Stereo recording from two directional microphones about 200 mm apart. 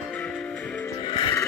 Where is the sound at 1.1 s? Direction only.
25° left (ahead or behind).